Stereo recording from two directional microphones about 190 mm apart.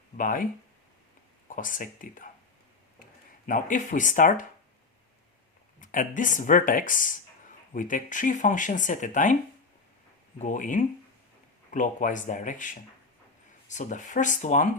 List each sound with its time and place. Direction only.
0.2 s speech: 45° left (ahead or behind)
1.5 s speech: 45° left (ahead or behind)
3.4 s speech: 45° left (ahead or behind)
5.8 s speech: 45° left (ahead or behind)